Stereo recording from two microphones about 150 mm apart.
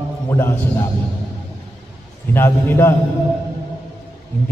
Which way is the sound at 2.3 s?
15° left (ahead or behind).